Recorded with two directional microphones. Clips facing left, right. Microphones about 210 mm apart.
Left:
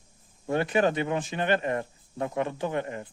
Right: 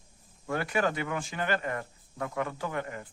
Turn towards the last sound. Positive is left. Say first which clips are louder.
# left 5 dB
turn(degrees=20)  # may be behind; listen again after turning